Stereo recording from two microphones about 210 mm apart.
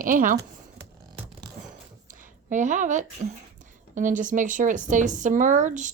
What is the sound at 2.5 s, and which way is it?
Speech, 35° right (ahead or behind).